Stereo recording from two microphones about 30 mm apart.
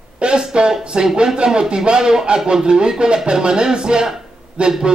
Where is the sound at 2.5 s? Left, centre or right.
Right.